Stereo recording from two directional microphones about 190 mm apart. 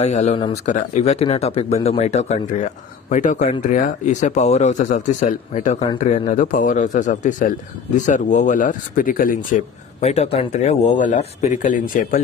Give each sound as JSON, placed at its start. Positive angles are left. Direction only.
{"t": 0.0, "sound": "speech", "side_deg": 35}